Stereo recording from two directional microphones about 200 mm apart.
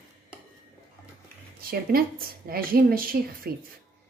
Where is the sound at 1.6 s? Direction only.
50° right (ahead or behind).